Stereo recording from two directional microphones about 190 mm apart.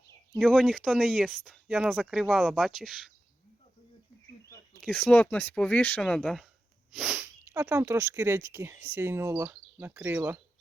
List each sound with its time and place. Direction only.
0.3 s speech: centre (ahead or behind)
4.4 s a sound: 15° left (ahead or behind)
4.8 s speech: 5° left (ahead or behind); by 10.4 s 10° right (ahead or behind)